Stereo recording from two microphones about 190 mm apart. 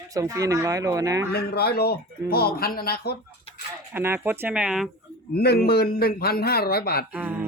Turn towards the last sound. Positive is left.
turn(degrees=-5)  # may be behind; listen again after turning